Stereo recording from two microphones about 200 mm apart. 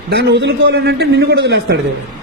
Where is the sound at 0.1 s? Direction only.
55° right (ahead or behind).